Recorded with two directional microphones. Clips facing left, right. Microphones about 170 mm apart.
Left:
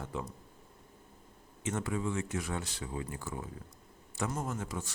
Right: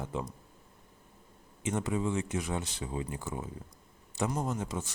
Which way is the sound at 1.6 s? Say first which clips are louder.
Right 3 dB; 20° right (ahead or behind).